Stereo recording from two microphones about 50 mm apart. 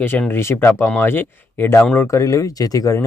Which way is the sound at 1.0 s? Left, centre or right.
Left.